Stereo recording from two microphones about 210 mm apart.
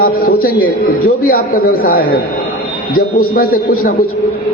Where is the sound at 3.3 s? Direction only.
40° left (ahead or behind).